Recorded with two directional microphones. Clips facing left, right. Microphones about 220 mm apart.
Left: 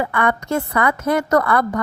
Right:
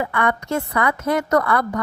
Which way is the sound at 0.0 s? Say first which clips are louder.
Left 2 dB; 50° left (ahead or behind).